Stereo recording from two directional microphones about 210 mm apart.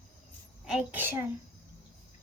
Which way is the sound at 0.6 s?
5° right (ahead or behind).